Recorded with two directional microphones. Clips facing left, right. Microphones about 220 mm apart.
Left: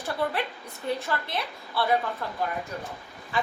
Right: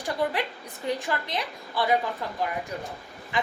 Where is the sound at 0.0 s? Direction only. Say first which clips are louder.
Right 1 dB; 15° right (ahead or behind).